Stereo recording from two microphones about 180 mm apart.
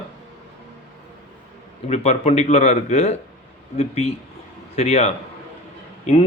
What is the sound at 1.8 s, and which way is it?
A man's voice, 35° left (ahead or behind).